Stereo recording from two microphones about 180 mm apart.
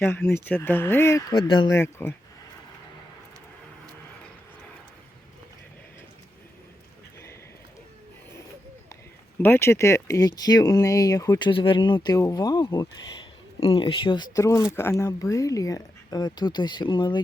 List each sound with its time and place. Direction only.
0.0 s speech: 15° left (ahead or behind)
1.3 s speech: 30° left (ahead or behind)
1.7 s speech: 10° left (ahead or behind)
9.4 s speech: 15° left (ahead or behind)